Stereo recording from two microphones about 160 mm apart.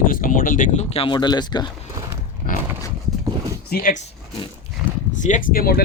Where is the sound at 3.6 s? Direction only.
60° left (ahead or behind).